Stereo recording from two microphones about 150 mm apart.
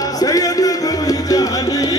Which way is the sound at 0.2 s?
25° left (ahead or behind).